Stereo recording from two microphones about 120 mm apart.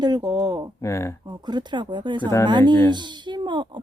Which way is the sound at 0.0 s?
35° right (ahead or behind).